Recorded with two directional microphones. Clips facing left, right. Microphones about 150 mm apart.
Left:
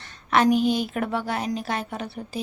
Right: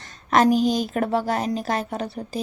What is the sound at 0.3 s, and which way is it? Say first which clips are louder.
A woman's voice: right 2 dB; 40° right (ahead or behind).